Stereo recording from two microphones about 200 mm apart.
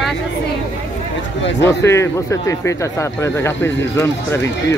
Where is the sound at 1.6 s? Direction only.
15° left (ahead or behind).